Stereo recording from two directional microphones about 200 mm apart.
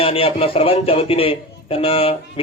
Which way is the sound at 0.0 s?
30° left (ahead or behind).